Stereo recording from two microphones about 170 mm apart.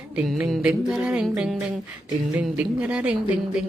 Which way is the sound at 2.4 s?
5° right (ahead or behind).